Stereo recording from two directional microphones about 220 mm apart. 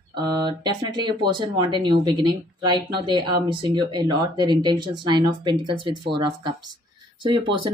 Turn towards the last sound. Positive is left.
turn(degrees=-20)  # may be behind; listen again after turning